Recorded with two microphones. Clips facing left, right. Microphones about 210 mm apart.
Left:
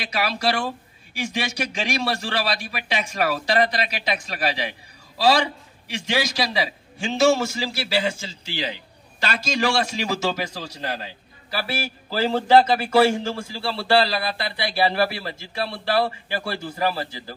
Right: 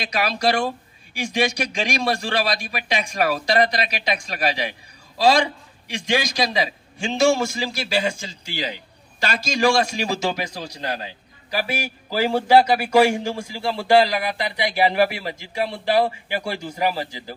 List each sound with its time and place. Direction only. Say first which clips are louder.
0.0 s a man's voice: right 2 dB; 15° right (ahead or behind)
5.9 s a man's voice: right 2 dB; 15° right (ahead or behind)